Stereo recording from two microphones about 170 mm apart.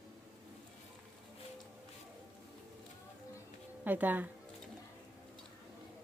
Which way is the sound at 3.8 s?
10° right (ahead or behind).